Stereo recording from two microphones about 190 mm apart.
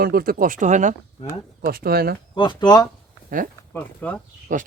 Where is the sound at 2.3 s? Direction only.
25° left (ahead or behind).